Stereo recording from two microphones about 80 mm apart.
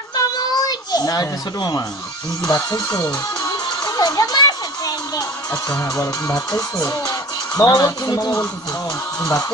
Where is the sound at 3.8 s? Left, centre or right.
Left.